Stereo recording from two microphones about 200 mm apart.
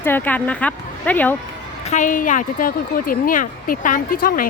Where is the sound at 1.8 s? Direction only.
35° left (ahead or behind).